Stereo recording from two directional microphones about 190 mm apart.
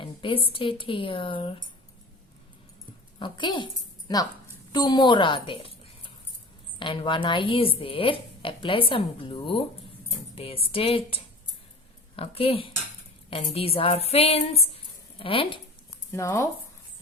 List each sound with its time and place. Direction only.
0.0 s speech: 25° left (ahead or behind)
3.2 s speech: 25° left (ahead or behind)
6.7 s speech: 25° left (ahead or behind)
16.1 s speech: 15° left (ahead or behind)